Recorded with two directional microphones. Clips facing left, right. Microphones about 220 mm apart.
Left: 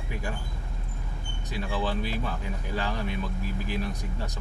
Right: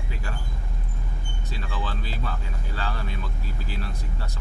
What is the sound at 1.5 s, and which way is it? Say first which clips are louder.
Speech: left 5 dB; 15° left (ahead or behind).